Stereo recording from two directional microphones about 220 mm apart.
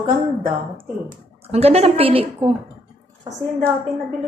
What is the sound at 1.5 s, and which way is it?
A woman's voice, 25° right (ahead or behind).